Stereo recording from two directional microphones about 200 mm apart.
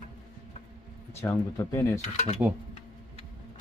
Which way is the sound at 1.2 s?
15° left (ahead or behind).